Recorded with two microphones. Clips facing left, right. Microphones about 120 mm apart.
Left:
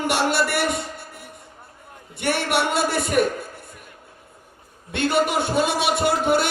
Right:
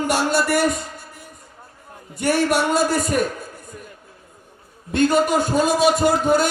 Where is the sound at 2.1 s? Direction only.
40° right (ahead or behind).